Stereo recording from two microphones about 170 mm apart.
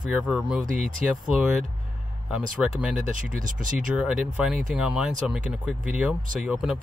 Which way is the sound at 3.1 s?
50° right (ahead or behind).